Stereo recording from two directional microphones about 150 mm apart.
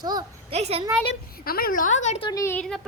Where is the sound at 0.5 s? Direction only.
45° right (ahead or behind).